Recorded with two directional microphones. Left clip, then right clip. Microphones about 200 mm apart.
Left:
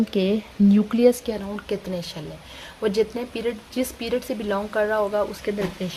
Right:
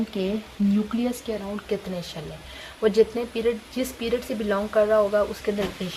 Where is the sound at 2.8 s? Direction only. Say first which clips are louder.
Right 3 dB; 35° left (ahead or behind).